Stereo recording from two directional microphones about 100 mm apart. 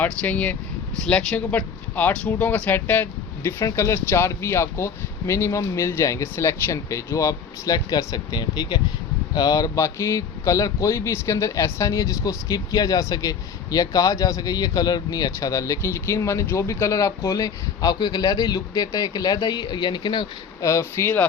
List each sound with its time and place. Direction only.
0.0 s speech: 15° left (ahead or behind); by 20.7 s 50° left (ahead or behind)
20.7 s speech: 30° left (ahead or behind)